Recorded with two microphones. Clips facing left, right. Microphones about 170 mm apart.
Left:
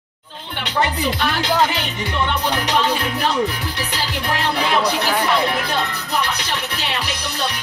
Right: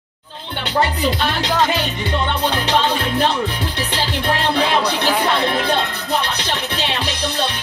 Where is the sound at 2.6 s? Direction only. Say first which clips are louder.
Right 1 dB; 30° right (ahead or behind).